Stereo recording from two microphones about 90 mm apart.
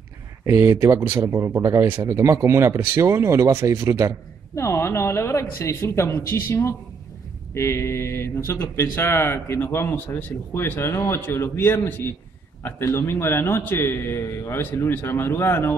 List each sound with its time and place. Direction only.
0.5 s speech: 30° right (ahead or behind)
4.6 s speech: 30° left (ahead or behind)